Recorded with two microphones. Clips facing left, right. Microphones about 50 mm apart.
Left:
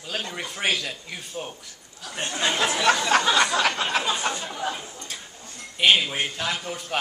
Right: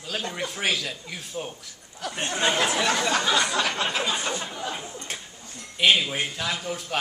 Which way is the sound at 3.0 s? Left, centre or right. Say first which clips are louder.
Left 3 dB; left.